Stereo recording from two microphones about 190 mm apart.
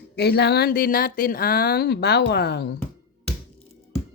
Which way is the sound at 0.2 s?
60° left (ahead or behind).